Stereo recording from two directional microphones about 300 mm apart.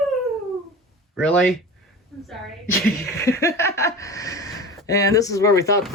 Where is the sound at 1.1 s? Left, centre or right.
Centre.